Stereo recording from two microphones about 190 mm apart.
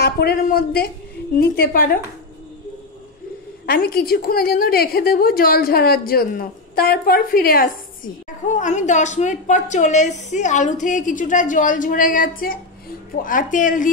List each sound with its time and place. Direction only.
0.0 s a woman's voice: 55° left (ahead or behind)
3.6 s a woman's voice: 55° left (ahead or behind)